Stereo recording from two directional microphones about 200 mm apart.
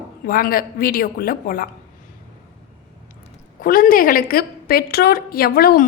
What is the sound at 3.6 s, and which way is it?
A woman's voice, 45° left (ahead or behind).